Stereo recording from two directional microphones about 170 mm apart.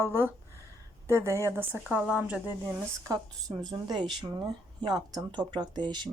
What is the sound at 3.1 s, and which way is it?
Speech, 25° right (ahead or behind).